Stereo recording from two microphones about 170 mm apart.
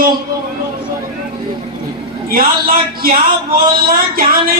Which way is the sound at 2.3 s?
60° right (ahead or behind).